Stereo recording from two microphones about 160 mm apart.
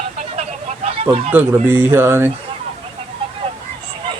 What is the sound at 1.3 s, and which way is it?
Speech, 15° right (ahead or behind).